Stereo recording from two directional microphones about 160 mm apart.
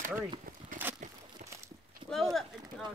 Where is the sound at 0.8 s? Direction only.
10° right (ahead or behind).